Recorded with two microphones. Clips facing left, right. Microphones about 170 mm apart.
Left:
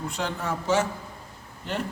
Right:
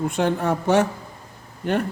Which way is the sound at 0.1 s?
55° right (ahead or behind).